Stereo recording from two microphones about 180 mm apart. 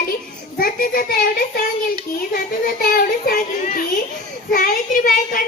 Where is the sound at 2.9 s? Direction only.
55° left (ahead or behind).